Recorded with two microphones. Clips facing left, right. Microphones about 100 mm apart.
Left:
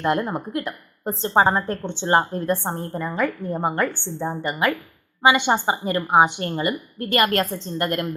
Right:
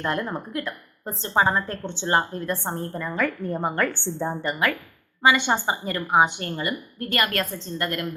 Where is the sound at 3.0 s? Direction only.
20° left (ahead or behind); by 4.4 s centre (ahead or behind).